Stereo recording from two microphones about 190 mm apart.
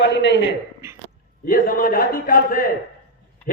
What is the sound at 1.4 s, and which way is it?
A man's voice, 45° left (ahead or behind).